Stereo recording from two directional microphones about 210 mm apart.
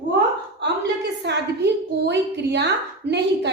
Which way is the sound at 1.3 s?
55° right (ahead or behind).